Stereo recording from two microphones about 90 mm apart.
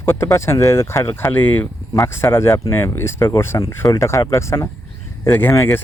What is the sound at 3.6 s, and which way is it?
Speech, 40° left (ahead or behind).